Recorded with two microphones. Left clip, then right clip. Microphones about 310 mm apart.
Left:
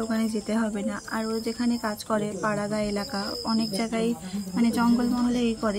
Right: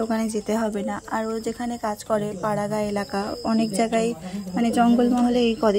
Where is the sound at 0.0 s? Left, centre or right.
Centre.